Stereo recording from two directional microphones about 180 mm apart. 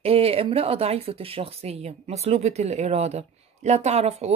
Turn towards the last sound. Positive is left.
turn(degrees=-35)  # may be behind; listen again after turning